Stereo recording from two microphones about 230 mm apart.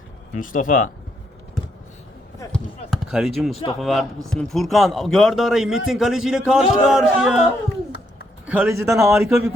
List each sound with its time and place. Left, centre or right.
0.3 s speech: left
2.4 s speech: centre
8.4 s a man's voice: centre